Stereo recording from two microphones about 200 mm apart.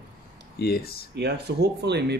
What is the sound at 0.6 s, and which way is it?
Speech, 50° left (ahead or behind).